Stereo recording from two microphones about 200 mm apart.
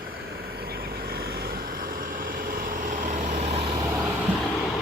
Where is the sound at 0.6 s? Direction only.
50° right (ahead or behind); by 3.7 s 30° right (ahead or behind).